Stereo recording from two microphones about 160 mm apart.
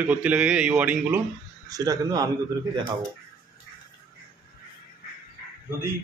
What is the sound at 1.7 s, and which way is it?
Speech, 20° right (ahead or behind).